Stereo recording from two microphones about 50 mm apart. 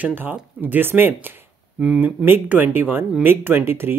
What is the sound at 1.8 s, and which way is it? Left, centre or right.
Speech, right.